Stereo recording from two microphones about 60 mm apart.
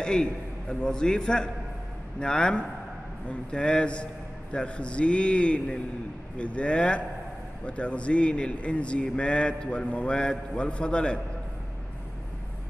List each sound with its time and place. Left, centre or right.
0.0 s a man's voice: centre